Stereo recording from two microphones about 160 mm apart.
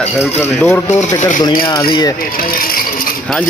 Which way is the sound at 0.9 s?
50° left (ahead or behind).